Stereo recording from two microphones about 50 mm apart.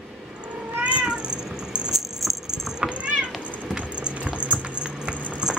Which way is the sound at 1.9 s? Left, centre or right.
Centre.